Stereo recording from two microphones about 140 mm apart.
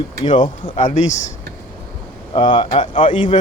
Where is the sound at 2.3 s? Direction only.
35° left (ahead or behind).